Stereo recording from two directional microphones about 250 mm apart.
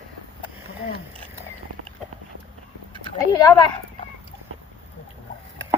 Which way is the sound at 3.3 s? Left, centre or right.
Centre.